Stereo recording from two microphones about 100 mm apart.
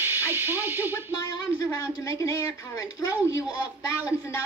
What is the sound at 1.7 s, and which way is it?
A woman's voice, 35° left (ahead or behind).